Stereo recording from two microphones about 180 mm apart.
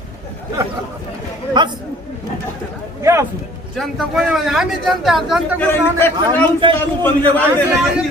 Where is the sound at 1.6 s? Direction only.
25° right (ahead or behind).